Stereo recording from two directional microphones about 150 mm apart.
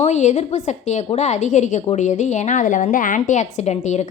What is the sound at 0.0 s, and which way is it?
A woman's voice, 50° left (ahead or behind).